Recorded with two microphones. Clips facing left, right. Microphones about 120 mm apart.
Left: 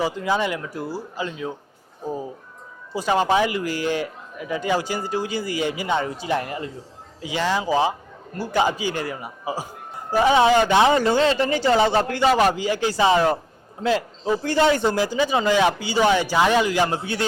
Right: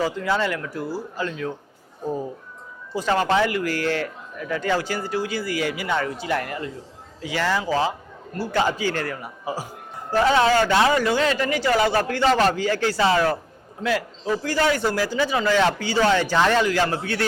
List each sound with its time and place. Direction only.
0.0 s speech: 15° left (ahead or behind)
2.0 s speech: 5° left (ahead or behind); by 12.2 s 25° left (ahead or behind)
12.2 s speech: 10° left (ahead or behind)